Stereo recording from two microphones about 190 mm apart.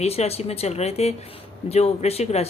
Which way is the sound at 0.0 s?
35° left (ahead or behind).